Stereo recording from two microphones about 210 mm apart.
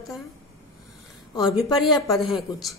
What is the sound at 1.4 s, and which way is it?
Speech, centre (ahead or behind).